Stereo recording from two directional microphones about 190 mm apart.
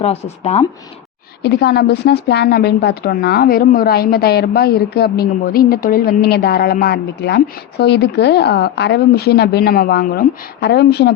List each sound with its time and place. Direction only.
0.0 s speech: 35° left (ahead or behind)
1.4 s a woman's voice: 60° left (ahead or behind)